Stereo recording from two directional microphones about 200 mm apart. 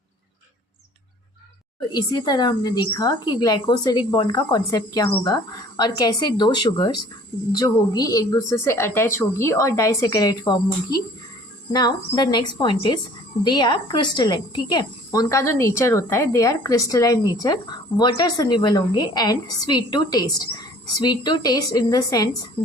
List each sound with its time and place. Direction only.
1.9 s a woman's voice: 20° left (ahead or behind)
11.7 s a woman's voice: 20° left (ahead or behind)